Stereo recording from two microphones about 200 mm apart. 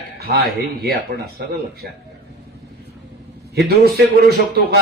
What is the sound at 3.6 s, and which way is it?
Speech, 50° right (ahead or behind).